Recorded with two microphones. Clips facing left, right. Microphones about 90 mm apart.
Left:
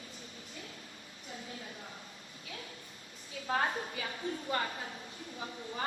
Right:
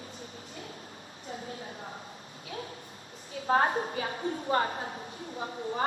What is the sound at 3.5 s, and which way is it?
A woman's voice, 40° right (ahead or behind).